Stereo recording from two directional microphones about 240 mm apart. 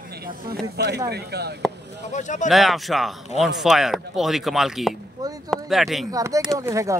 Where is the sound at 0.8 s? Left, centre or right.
Right.